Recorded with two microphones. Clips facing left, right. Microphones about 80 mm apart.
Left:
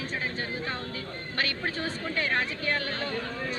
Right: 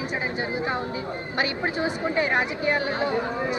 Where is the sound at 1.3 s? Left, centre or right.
Centre.